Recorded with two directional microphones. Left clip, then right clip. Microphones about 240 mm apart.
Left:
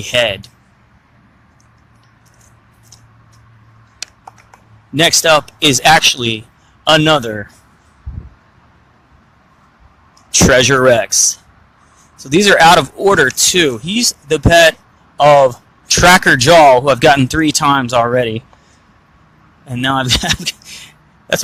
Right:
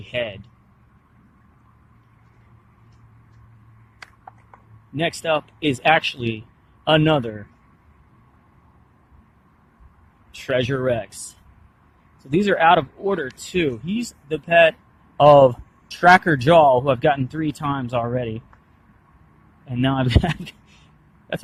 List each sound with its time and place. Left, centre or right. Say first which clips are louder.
0.0 s speech: left 13 dB; centre
4.9 s speech: left 12 dB; centre
10.5 s speech: left 11 dB; centre
12.2 s speech: left 9 dB; centre
19.6 s speech: left 7 dB; centre